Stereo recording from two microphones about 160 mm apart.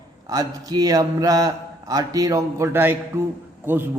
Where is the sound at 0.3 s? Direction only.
20° right (ahead or behind).